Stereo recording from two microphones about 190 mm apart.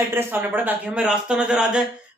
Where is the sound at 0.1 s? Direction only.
10° right (ahead or behind).